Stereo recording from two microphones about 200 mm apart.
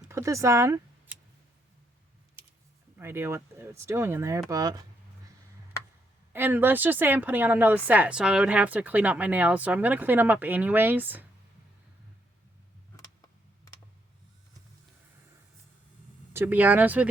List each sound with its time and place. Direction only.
0.0 s a sound: 15° right (ahead or behind)
3.0 s speech: 10° right (ahead or behind)
6.3 s speech: 10° right (ahead or behind)
16.3 s speech: 10° right (ahead or behind)